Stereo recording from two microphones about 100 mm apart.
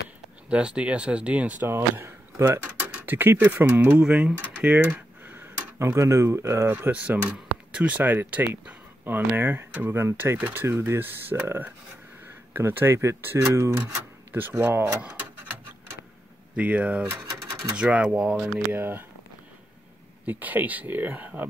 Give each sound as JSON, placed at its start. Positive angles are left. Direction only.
{"t": 0.5, "sound": "speech", "side_deg": -10}
{"t": 2.6, "sound": "speech", "side_deg": -15}
{"t": 6.7, "sound": "speech", "side_deg": -15}
{"t": 14.6, "sound": "speech", "side_deg": -20}
{"t": 16.5, "sound": "speech", "side_deg": -15}
{"t": 18.7, "sound": "speech", "side_deg": -20}
{"t": 20.2, "sound": "speech", "side_deg": -15}